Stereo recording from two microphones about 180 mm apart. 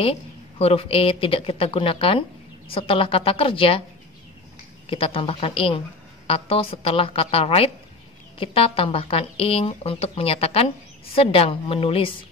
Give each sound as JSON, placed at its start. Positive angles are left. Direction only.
{"t": 0.0, "sound": "a woman's voice", "side_deg": 35}
{"t": 4.8, "sound": "a woman's voice", "side_deg": 30}